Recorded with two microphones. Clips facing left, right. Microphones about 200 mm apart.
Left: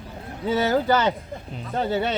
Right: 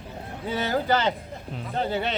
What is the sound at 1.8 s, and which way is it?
Speech, 15° left (ahead or behind).